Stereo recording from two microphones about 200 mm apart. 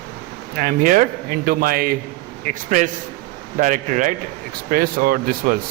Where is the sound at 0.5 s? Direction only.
45° right (ahead or behind).